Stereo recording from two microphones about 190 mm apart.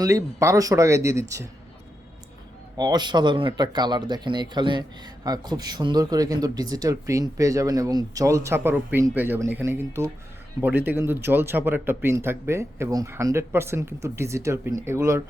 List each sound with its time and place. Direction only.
0.0 s speech: 15° right (ahead or behind)
2.7 s speech: 20° right (ahead or behind)